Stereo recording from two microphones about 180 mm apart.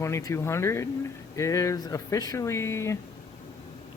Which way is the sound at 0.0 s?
15° left (ahead or behind).